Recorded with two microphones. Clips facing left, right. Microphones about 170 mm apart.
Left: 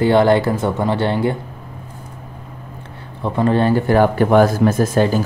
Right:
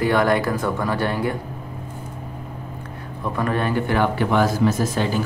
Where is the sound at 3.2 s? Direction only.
30° left (ahead or behind); by 5.2 s 50° left (ahead or behind).